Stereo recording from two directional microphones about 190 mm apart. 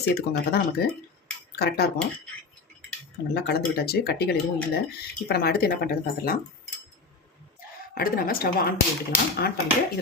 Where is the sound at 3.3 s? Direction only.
60° left (ahead or behind).